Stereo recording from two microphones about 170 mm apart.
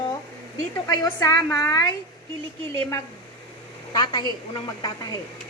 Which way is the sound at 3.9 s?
25° left (ahead or behind).